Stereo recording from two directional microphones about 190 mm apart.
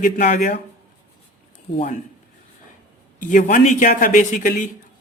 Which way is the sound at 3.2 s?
40° left (ahead or behind).